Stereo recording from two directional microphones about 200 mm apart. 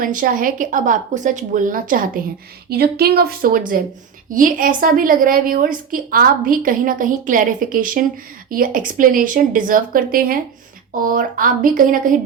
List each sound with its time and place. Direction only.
0.0 s a woman's voice: 45° right (ahead or behind)